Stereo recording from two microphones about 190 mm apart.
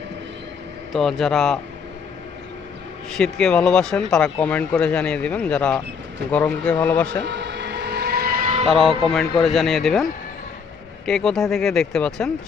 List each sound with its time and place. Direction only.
0.9 s speech: centre (ahead or behind)
3.1 s speech: centre (ahead or behind)
7.3 s vehicle: 65° right (ahead or behind); by 8.7 s 35° right (ahead or behind)
9.4 s speech: centre (ahead or behind)